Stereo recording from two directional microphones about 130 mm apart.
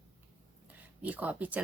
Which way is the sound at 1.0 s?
10° right (ahead or behind).